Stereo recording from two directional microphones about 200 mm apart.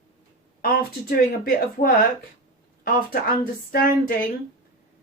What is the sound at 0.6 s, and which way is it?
Speech, 45° left (ahead or behind).